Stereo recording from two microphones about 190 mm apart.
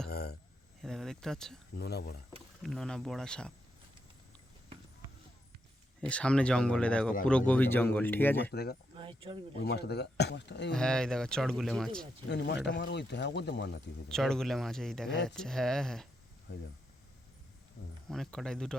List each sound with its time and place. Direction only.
0.1 s a sound: 55° left (ahead or behind)
0.8 s speech: centre (ahead or behind)
1.7 s speech: 55° left (ahead or behind)
2.6 s speech: 5° left (ahead or behind)
6.1 s speech: 5° left (ahead or behind)
8.4 s speech: 55° left (ahead or behind)
9.0 s speech: 25° right (ahead or behind)
9.6 s speech: 60° left (ahead or behind)
10.7 s speech: 5° left (ahead or behind)
12.3 s speech: 65° left (ahead or behind)
14.1 s speech: centre (ahead or behind)
18.1 s speech: centre (ahead or behind)